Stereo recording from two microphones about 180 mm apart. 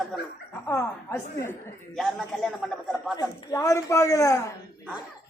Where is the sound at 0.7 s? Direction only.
15° left (ahead or behind).